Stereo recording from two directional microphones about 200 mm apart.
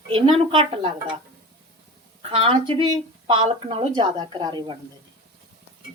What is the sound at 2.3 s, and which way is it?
A woman's voice, 25° right (ahead or behind).